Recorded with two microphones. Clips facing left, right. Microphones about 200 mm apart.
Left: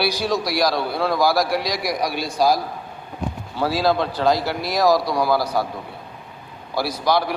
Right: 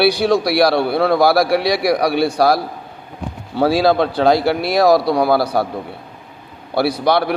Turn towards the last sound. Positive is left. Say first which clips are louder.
# right 5 dB
turn(degrees=-65)  # may be behind; listen again after turning